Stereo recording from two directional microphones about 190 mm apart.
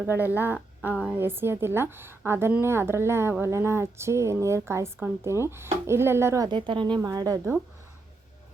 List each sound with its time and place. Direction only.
0.0 s a woman's voice: 10° right (ahead or behind)